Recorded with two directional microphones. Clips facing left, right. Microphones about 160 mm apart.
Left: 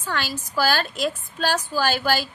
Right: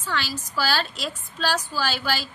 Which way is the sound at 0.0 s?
50° left (ahead or behind).